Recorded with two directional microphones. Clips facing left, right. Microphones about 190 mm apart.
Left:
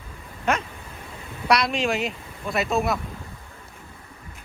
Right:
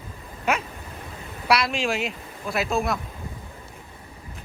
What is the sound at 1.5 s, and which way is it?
Speech, centre (ahead or behind).